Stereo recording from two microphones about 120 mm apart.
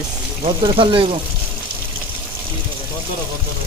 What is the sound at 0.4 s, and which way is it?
Speech, 45° right (ahead or behind).